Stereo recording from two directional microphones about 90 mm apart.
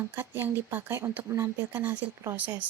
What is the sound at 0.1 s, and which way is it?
A woman's voice, 25° right (ahead or behind).